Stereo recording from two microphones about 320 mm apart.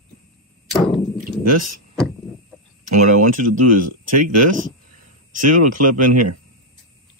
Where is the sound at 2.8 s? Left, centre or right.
Right.